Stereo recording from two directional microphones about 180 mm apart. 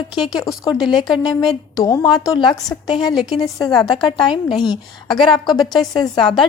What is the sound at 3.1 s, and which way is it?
Speech, centre (ahead or behind).